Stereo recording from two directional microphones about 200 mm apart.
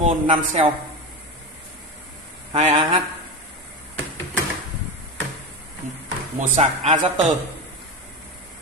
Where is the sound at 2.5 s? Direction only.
30° right (ahead or behind).